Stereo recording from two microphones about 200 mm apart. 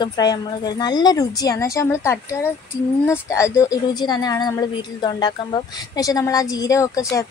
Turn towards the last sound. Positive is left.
turn(degrees=15)  # may be behind; listen again after turning